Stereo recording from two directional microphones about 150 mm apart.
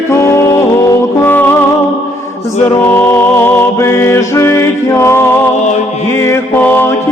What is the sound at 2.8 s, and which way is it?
Music, 20° left (ahead or behind).